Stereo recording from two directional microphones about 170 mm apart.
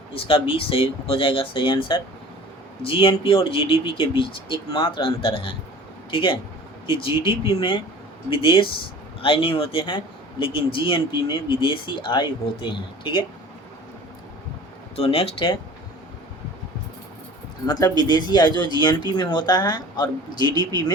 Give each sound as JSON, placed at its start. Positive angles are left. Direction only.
{"t": 0.1, "sound": "speech", "side_deg": 35}
{"t": 14.9, "sound": "speech", "side_deg": 35}
{"t": 17.7, "sound": "speech", "side_deg": 25}